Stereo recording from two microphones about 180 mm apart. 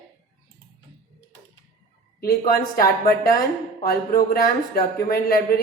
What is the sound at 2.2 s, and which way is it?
A man's voice, 55° left (ahead or behind).